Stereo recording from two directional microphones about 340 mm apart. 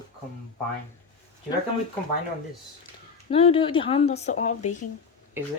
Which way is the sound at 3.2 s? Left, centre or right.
Centre.